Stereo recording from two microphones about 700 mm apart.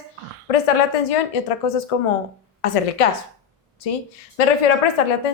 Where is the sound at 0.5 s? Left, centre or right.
Left.